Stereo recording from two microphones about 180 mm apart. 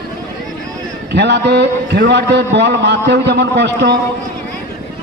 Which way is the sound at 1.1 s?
70° right (ahead or behind).